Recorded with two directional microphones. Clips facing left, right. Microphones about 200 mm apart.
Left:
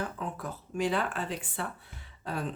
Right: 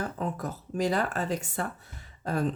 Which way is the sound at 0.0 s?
40° right (ahead or behind).